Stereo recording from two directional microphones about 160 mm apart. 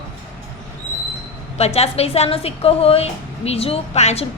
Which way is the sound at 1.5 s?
40° left (ahead or behind).